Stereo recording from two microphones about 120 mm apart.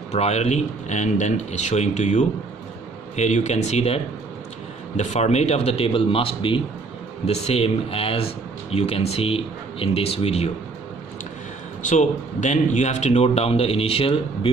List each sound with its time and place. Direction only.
0.1 s a man's voice: 60° left (ahead or behind); by 6.6 s 45° left (ahead or behind)
7.2 s a man's voice: 60° left (ahead or behind)
11.8 s a man's voice: 90° left; by 14.5 s 50° left (ahead or behind)